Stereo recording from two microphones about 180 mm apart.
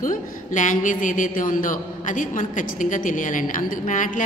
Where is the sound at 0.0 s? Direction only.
45° left (ahead or behind).